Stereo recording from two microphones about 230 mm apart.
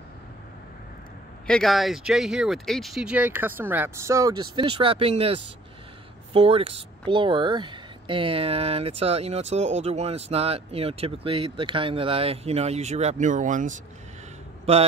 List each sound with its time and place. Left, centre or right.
1.5 s speech: centre; by 13.7 s right